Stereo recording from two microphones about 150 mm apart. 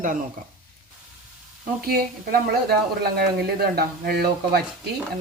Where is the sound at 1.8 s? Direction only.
90° right.